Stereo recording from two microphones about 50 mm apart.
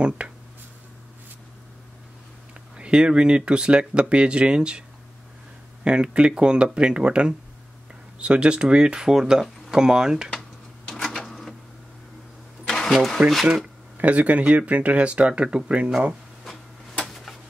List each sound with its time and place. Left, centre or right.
0.2 s a sound: right
2.8 s speech: centre
5.9 s speech: centre
10.9 s printer: centre
12.6 s vehicle: centre
13.2 s speech: right
17.1 s a sound: centre